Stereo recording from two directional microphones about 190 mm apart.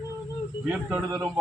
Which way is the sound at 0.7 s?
10° right (ahead or behind).